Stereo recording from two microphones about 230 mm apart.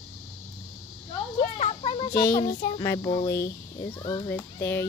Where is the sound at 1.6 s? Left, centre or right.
Left.